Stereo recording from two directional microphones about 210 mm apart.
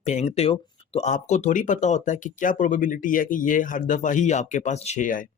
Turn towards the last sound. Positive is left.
turn(degrees=35)  # may be behind; listen again after turning